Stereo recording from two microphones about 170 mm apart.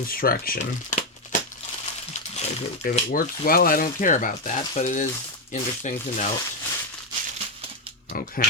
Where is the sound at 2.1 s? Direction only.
45° left (ahead or behind).